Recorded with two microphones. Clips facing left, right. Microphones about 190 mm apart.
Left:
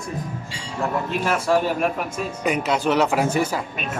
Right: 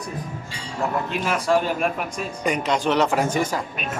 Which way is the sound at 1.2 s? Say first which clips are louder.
Left 1 dB; 5° left (ahead or behind).